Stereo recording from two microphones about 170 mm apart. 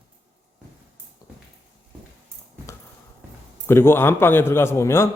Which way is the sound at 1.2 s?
20° left (ahead or behind).